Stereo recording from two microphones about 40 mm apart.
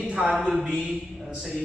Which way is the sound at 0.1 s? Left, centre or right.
Centre.